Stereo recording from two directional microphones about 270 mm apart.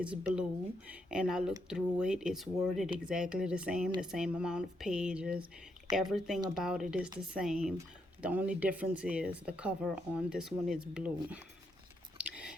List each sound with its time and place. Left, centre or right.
0.0 s speech: centre
12.1 s chewing: centre